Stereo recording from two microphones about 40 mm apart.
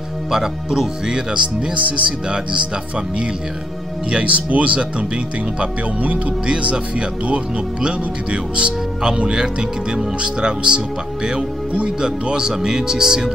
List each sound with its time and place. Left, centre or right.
0.3 s speech: centre
1.8 s speech: right
2.2 s speech: right
4.1 s speech: right; by 13.3 s centre